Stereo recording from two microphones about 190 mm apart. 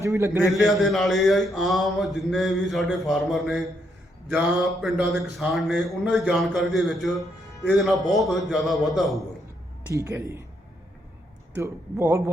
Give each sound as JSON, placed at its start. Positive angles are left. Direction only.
{"t": 0.0, "sound": "a man's voice", "side_deg": -15}
{"t": 0.3, "sound": "a man's voice", "side_deg": 0}
{"t": 9.9, "sound": "a man's voice", "side_deg": -15}
{"t": 11.5, "sound": "a man's voice", "side_deg": -10}